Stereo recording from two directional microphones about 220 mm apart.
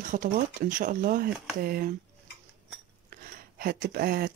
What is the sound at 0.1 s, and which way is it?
Speech, 35° right (ahead or behind).